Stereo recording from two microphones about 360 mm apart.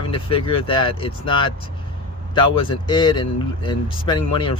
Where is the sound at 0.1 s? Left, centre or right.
Centre.